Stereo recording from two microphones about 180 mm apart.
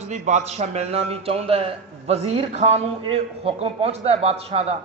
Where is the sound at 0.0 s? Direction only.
40° right (ahead or behind).